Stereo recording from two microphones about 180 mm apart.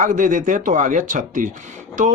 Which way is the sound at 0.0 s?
45° right (ahead or behind).